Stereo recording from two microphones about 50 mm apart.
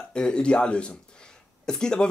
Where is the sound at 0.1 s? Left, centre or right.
Centre.